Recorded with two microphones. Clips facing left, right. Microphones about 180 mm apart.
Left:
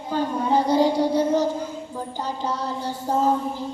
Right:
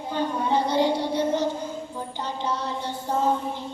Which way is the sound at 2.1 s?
40° left (ahead or behind).